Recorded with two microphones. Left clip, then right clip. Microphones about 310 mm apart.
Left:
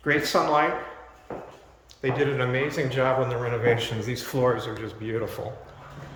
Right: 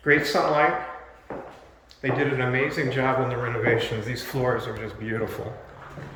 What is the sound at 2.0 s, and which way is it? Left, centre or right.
A man's voice, centre.